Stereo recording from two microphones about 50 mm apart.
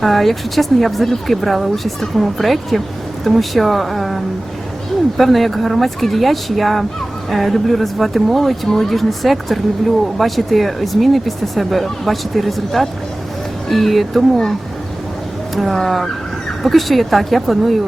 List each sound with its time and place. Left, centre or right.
0.0 s speech: centre
15.5 s speech: centre